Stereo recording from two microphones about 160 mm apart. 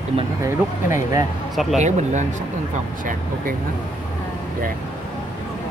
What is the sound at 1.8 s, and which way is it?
Speech, 45° right (ahead or behind).